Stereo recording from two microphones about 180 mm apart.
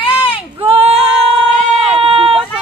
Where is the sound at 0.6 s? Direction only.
35° right (ahead or behind).